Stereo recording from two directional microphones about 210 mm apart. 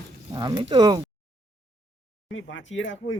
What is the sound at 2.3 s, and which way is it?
Speech, 65° left (ahead or behind).